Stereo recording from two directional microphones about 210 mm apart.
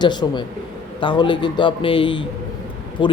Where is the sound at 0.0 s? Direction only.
20° left (ahead or behind).